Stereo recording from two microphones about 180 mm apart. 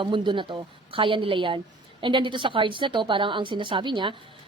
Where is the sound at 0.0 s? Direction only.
25° right (ahead or behind).